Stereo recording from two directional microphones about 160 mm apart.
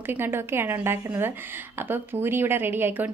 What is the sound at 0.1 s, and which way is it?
A woman's voice, 15° right (ahead or behind).